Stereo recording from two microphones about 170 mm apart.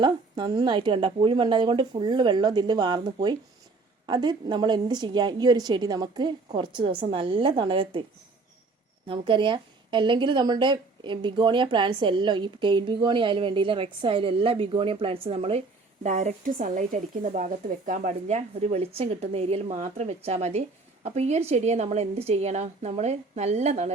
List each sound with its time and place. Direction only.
0.0 s a woman's voice: 25° right (ahead or behind)
9.0 s a woman's voice: 30° right (ahead or behind)